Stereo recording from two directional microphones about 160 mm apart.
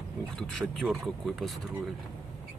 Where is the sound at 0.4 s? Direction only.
Centre (ahead or behind).